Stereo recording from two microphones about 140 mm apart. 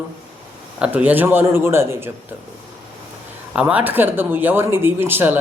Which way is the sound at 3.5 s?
10° right (ahead or behind).